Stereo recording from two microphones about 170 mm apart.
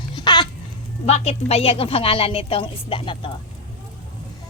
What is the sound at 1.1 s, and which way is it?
A woman's voice, 40° left (ahead or behind).